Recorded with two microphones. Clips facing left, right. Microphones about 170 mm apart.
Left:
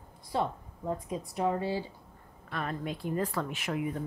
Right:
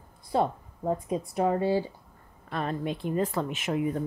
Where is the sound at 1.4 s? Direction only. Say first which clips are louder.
Right 5 dB; 50° right (ahead or behind).